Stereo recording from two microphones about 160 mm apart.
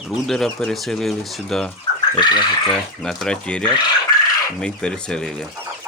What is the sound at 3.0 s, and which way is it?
Speech, 5° left (ahead or behind).